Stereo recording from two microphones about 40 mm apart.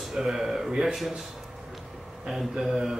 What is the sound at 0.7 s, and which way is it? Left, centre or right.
Speech, right.